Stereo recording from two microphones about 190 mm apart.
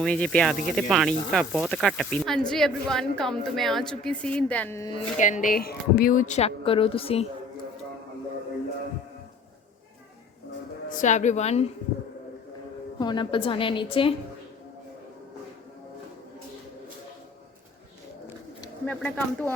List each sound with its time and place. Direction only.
0.0 s speech: 5° left (ahead or behind)
5.1 s speech: 40° left (ahead or behind)
10.8 s speech: 40° left (ahead or behind)
13.0 s a woman's voice: 25° left (ahead or behind)
18.9 s speech: 5° left (ahead or behind)